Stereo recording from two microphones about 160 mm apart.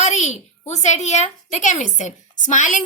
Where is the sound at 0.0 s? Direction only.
45° left (ahead or behind).